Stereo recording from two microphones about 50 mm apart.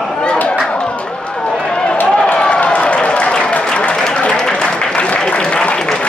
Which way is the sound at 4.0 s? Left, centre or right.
Centre.